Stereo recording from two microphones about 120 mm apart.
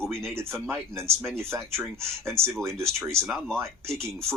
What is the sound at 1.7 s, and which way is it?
Speech, 20° right (ahead or behind).